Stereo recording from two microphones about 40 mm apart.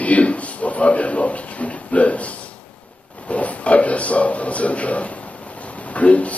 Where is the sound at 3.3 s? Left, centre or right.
Left.